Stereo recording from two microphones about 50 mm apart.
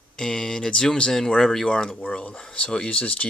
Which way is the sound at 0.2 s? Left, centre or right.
Centre.